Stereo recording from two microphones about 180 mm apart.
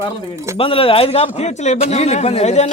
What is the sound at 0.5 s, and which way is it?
Speech, 30° left (ahead or behind).